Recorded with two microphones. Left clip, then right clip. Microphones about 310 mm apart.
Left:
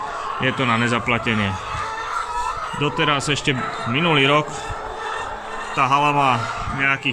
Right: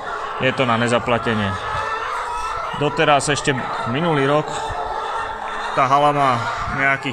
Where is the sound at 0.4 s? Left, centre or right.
Centre.